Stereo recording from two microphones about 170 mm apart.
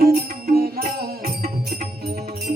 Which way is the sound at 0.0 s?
60° right (ahead or behind).